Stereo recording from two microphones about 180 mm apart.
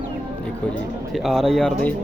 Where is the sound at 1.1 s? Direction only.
Centre (ahead or behind).